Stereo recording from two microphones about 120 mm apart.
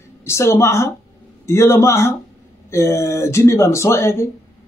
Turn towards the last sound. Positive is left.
turn(degrees=25)  # may be behind; listen again after turning